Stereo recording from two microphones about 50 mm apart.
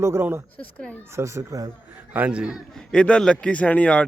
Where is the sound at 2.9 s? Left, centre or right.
Centre.